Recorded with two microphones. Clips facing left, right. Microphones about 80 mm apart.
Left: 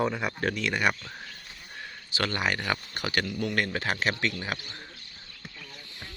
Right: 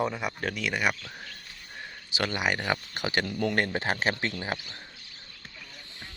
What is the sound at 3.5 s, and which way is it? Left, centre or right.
Speech, right.